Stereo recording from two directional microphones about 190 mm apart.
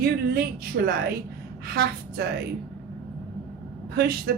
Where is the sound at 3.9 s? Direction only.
55° right (ahead or behind).